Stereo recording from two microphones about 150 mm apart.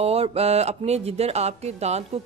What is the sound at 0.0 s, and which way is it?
Speech, 40° right (ahead or behind).